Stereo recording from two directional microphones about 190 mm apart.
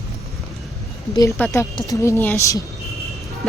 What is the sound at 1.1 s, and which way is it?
A woman's voice, 15° left (ahead or behind).